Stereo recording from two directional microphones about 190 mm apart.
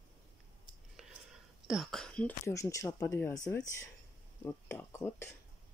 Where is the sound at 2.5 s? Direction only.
15° left (ahead or behind).